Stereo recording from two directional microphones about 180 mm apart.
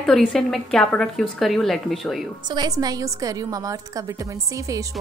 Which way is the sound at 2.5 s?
20° right (ahead or behind).